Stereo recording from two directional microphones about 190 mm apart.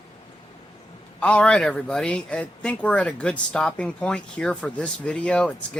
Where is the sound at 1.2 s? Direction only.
5° left (ahead or behind).